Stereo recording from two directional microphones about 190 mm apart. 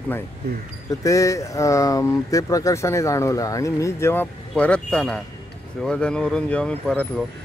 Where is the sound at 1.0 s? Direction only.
15° left (ahead or behind).